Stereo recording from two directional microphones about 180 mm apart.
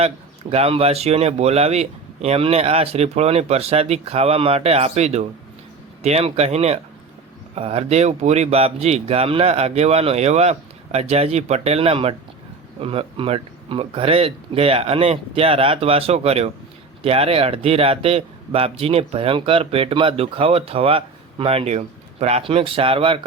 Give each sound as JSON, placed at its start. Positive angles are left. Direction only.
{"t": 0.5, "sound": "a man's voice", "side_deg": -35}